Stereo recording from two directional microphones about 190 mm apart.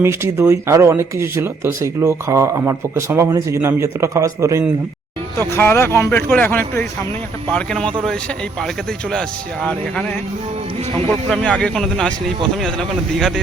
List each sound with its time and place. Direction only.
0.0 s speech: 15° right (ahead or behind)
5.4 s speech: 10° left (ahead or behind)
9.6 s speech: 5° left (ahead or behind)
11.3 s speech: 5° left (ahead or behind)